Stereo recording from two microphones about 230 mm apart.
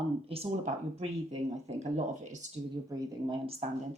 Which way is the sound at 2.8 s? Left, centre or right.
Centre.